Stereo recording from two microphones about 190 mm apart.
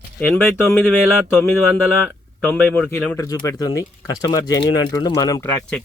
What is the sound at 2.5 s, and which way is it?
Speech, 10° left (ahead or behind).